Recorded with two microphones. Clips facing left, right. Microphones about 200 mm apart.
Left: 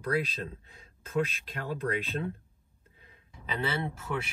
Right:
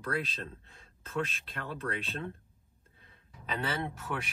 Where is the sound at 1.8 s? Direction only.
30° left (ahead or behind).